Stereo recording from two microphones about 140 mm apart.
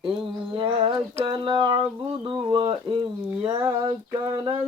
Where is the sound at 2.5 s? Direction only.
40° right (ahead or behind).